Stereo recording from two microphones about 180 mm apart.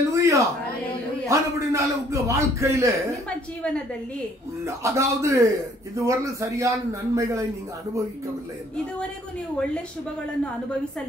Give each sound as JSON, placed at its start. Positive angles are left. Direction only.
{"t": 0.1, "sound": "a sound", "side_deg": -15}
{"t": 1.3, "sound": "a man's voice", "side_deg": -15}
{"t": 3.3, "sound": "a woman's voice", "side_deg": 5}
{"t": 4.6, "sound": "a man's voice", "side_deg": -15}